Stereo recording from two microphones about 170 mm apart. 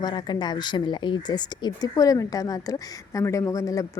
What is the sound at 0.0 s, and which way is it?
A woman's voice, 25° left (ahead or behind).